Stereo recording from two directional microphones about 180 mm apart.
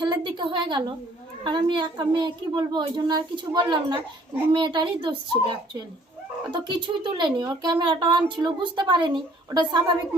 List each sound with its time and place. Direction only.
0.0 s a woman's voice: 25° right (ahead or behind)